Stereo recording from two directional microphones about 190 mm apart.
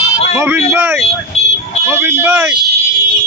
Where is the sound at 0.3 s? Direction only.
10° right (ahead or behind).